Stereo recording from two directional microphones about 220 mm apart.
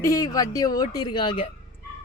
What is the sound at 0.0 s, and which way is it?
Speech, 15° left (ahead or behind).